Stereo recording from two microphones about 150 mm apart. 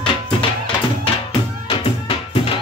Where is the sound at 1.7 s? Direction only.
40° left (ahead or behind).